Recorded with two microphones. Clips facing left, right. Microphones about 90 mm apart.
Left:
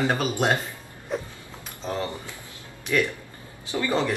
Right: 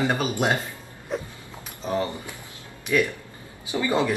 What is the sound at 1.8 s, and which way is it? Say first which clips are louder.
Speech: right 3 dB; 15° right (ahead or behind).